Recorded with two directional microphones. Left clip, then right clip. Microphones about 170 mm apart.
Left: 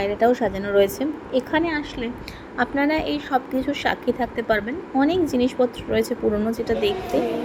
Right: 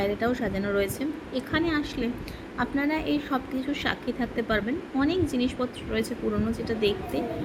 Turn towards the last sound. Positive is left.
turn(degrees=20)  # may be behind; listen again after turning